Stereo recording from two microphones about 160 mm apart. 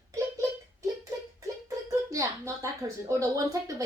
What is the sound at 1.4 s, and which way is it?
Speech, 20° right (ahead or behind).